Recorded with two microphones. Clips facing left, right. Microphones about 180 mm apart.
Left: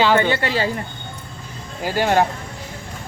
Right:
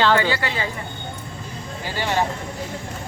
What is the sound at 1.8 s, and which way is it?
Speech, 45° left (ahead or behind).